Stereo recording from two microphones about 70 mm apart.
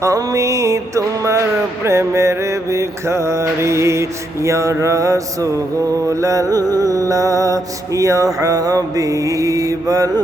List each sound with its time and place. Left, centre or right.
0.0 s music: right
6.7 s mantra: right